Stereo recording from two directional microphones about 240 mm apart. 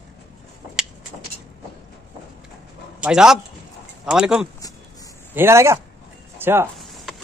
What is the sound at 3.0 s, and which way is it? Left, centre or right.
Speech, centre.